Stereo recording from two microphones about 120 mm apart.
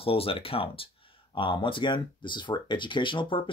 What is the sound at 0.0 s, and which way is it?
Speech, 50° left (ahead or behind).